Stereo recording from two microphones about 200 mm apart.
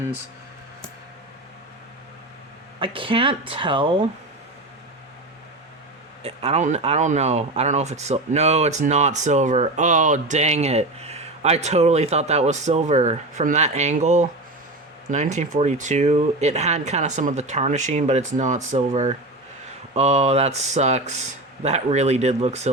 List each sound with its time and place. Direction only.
2.8 s speech: 25° right (ahead or behind)
6.2 s speech: 30° right (ahead or behind)